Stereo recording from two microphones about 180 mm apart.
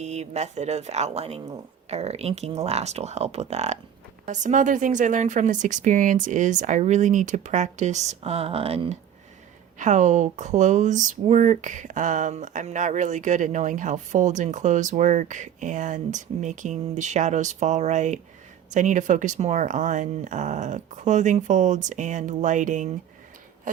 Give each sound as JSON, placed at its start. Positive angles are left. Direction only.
{"t": 0.0, "sound": "speech", "side_deg": -40}